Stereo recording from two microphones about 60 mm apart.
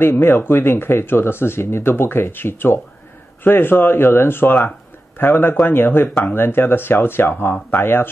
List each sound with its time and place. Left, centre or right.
0.0 s speech: left